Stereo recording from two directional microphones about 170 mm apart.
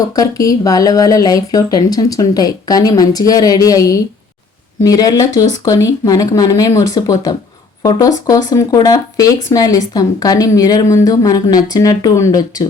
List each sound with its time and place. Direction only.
0.2 s speech: 20° left (ahead or behind)